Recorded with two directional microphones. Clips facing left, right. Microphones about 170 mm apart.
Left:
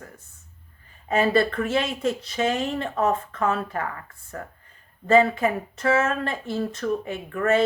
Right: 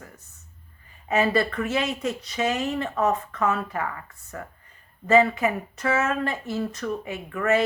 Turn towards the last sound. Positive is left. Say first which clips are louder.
# left 1 dB
turn(degrees=30)  # may be behind; listen again after turning